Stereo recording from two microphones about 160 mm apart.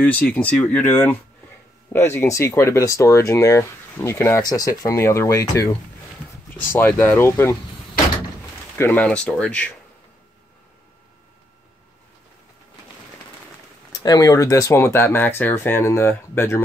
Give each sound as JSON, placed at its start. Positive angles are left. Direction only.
{"t": 0.0, "sound": "speech", "side_deg": 10}
{"t": 8.7, "sound": "speech", "side_deg": 10}
{"t": 14.0, "sound": "speech", "side_deg": 20}